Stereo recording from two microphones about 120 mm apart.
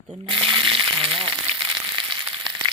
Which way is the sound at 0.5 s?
45° right (ahead or behind).